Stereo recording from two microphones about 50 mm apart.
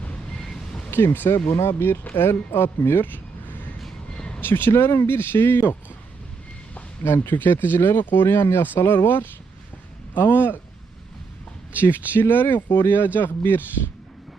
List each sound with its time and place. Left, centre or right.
0.3 s a sound: centre
0.9 s speech: left
4.4 s a sound: left
4.8 s speech: left
7.0 s speech: left
12.1 s speech: left